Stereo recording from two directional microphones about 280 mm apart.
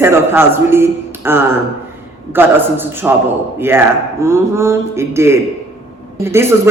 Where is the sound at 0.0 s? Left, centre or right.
Centre.